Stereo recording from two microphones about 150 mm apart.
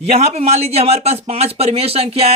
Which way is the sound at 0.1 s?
45° right (ahead or behind).